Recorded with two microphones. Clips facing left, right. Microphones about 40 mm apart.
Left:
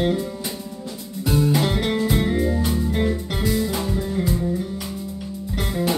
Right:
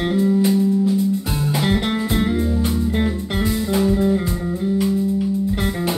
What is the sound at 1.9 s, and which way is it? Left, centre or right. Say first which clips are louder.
Music: right 1 dB; centre.